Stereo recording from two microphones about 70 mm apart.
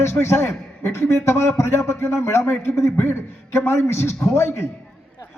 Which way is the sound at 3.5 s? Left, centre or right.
Left.